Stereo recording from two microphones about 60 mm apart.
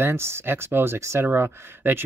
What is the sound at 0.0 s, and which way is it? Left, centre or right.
Speech, right.